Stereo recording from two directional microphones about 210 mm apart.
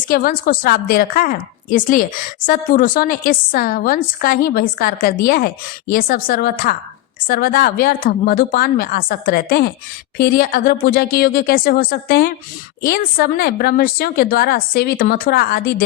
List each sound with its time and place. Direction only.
0.1 s a woman's voice: 45° left (ahead or behind)